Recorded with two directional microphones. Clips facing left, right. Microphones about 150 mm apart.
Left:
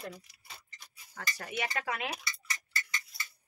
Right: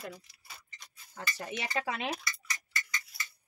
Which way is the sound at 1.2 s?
25° right (ahead or behind).